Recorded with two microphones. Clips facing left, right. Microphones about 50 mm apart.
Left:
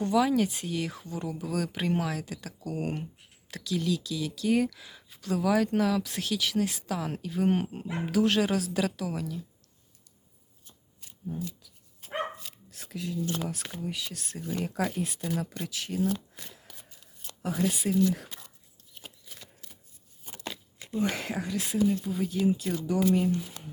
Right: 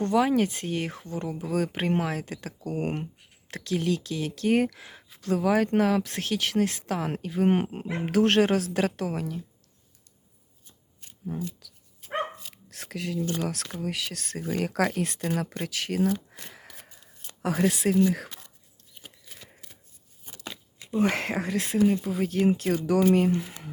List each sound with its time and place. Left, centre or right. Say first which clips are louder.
0.0 s speech: right 2 dB; right
7.9 s speech: right 3 dB; right
11.3 s speech: right 3 dB; right
12.7 s speech: right 3 dB; right
13.4 s speech: right 4 dB; right
15.3 s speech: right 3 dB; right
15.7 s speech: right 4 dB; right
16.3 s a sound: right 3 dB; right
17.7 s speech: right 5 dB; right
21.0 s speech: right 5 dB; right